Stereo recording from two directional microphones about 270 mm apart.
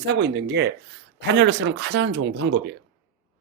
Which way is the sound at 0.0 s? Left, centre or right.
Right.